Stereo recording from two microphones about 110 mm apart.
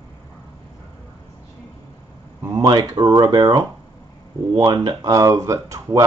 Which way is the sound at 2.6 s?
35° right (ahead or behind).